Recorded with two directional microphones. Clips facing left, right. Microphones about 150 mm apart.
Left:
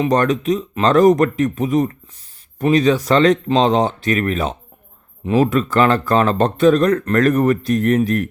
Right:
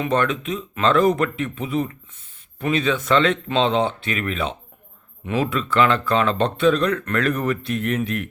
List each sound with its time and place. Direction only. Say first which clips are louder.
0.0 s speech: left 5 dB; 40° left (ahead or behind)